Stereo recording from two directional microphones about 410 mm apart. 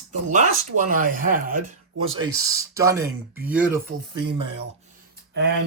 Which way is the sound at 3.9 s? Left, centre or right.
Centre.